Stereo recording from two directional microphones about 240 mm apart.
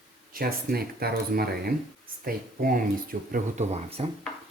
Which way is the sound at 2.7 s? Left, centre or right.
Right.